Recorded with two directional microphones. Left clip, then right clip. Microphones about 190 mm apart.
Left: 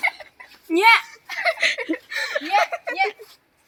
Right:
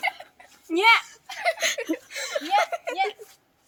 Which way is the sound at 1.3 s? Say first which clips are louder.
Left 5 dB; 20° right (ahead or behind).